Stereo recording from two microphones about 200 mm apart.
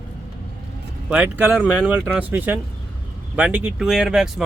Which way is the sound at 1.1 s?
10° right (ahead or behind).